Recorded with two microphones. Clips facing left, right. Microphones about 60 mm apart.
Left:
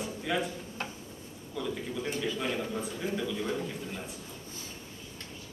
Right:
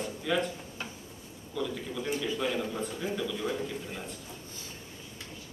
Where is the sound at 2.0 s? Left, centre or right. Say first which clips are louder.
Right 2 dB; centre.